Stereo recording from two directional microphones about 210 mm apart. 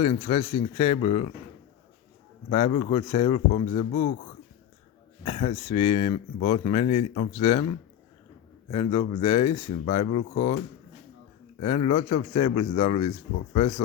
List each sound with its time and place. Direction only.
0.0 s speech: 30° left (ahead or behind)
2.5 s speech: 25° left (ahead or behind)
5.2 s speech: 30° left (ahead or behind)
8.7 s speech: 30° left (ahead or behind)
11.6 s speech: 30° left (ahead or behind)